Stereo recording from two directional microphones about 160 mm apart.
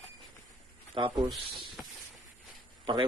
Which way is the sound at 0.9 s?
35° right (ahead or behind).